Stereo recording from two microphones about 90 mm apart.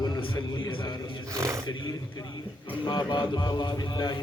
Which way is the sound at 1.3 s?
35° right (ahead or behind).